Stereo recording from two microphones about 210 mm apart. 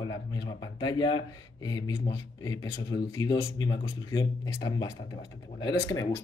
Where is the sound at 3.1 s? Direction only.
20° left (ahead or behind).